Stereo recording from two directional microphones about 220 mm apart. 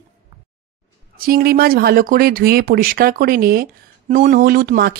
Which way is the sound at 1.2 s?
45° right (ahead or behind).